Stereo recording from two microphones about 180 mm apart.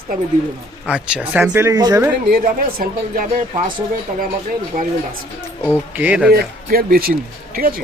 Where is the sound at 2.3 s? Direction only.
55° right (ahead or behind).